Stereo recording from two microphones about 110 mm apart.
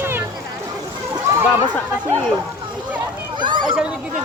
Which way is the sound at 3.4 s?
45° right (ahead or behind).